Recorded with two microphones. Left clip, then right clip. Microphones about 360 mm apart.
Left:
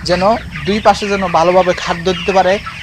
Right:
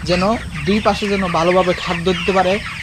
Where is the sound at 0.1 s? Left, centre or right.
Left.